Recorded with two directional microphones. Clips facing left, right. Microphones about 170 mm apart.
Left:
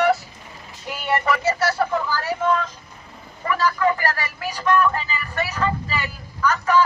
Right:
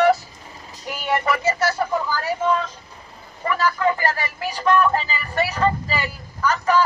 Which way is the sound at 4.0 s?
25° right (ahead or behind).